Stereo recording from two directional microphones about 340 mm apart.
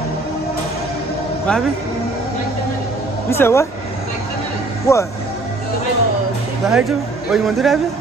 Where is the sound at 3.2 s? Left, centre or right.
Centre.